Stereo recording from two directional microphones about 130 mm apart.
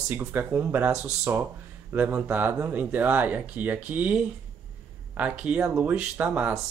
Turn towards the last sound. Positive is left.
turn(degrees=-10)  # may be behind; listen again after turning